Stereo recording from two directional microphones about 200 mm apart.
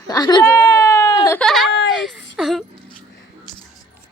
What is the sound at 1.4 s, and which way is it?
Speech, centre (ahead or behind).